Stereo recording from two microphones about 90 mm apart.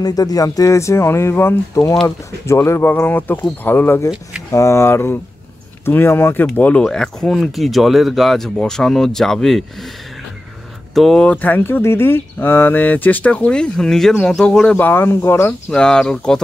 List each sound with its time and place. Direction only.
0.0 s speech: 45° left (ahead or behind); by 6.8 s 15° left (ahead or behind)
6.8 s speech: 5° left (ahead or behind)
11.0 s speech: 5° left (ahead or behind)
11.2 s speech: 20° left (ahead or behind)
14.8 s speech: 25° left (ahead or behind)
15.7 s speech: 10° left (ahead or behind)